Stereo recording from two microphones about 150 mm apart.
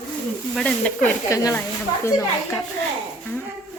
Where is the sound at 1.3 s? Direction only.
20° left (ahead or behind).